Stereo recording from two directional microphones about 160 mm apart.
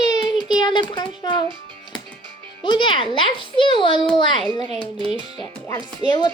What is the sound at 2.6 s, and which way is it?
A child's voice, 30° left (ahead or behind).